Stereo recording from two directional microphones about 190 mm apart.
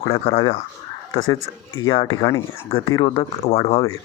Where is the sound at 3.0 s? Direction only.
25° left (ahead or behind).